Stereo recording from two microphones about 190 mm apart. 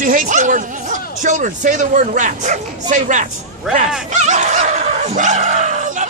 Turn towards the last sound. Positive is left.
turn(degrees=-40)  # may be behind; listen again after turning